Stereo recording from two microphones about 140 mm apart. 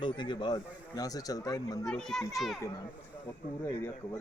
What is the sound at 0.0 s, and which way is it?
Speech, 35° left (ahead or behind).